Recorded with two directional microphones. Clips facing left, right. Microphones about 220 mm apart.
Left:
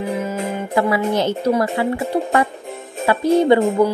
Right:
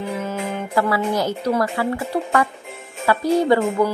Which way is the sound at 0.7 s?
20° left (ahead or behind).